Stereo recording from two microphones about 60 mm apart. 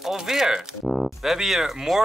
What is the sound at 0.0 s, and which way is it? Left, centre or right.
Speech, centre.